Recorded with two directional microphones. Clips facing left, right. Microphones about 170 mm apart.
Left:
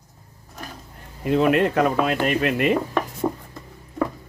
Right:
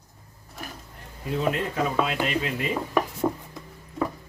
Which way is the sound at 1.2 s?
70° left (ahead or behind).